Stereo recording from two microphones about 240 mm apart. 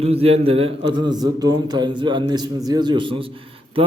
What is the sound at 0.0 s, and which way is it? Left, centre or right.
A man's voice, right.